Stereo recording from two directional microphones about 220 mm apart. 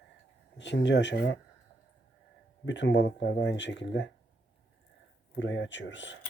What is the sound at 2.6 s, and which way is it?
Speech, 55° left (ahead or behind).